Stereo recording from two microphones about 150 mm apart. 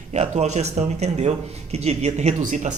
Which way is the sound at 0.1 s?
50° right (ahead or behind).